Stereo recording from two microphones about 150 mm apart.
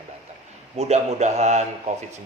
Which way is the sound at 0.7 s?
45° right (ahead or behind).